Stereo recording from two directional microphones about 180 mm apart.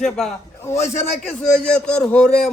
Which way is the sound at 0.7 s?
35° left (ahead or behind).